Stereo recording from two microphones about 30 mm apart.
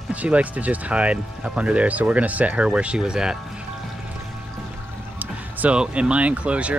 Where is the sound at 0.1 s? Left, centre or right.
Right.